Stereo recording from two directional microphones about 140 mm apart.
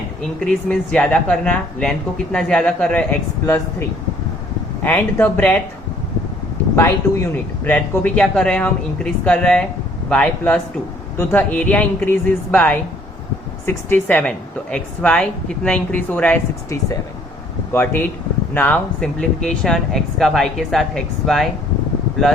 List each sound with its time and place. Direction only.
0.3 s a woman's voice: 5° left (ahead or behind)
7.6 s a woman's voice: 10° left (ahead or behind)
16.6 s speech: 20° left (ahead or behind); by 21.4 s 5° left (ahead or behind)